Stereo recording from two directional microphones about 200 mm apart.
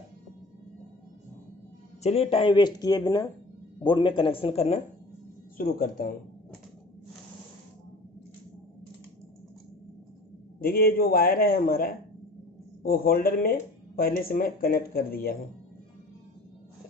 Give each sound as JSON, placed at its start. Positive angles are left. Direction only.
{"t": 2.0, "sound": "speech", "side_deg": 30}
{"t": 5.6, "sound": "speech", "side_deg": 45}
{"t": 10.6, "sound": "speech", "side_deg": 50}